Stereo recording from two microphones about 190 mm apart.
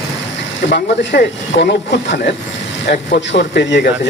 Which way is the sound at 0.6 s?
65° left (ahead or behind).